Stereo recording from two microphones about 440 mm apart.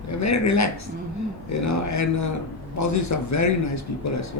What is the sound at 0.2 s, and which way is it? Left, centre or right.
Speech, left.